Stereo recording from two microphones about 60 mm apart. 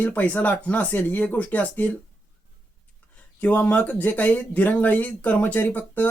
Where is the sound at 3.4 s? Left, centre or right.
Left.